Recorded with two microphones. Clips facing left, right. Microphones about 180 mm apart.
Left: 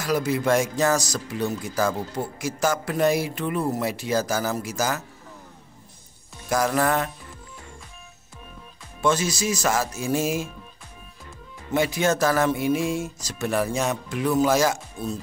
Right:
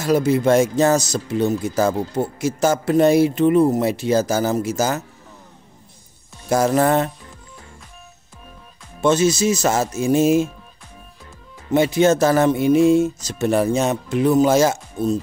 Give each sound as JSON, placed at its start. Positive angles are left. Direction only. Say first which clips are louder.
{"t": 0.0, "sound": "speech", "louder": "right 7 dB", "side_deg": -25}
{"t": 6.5, "sound": "speech", "louder": "right 6 dB", "side_deg": -25}
{"t": 9.0, "sound": "speech", "louder": "right 7 dB", "side_deg": -25}
{"t": 11.7, "sound": "speech", "louder": "right 7 dB", "side_deg": -25}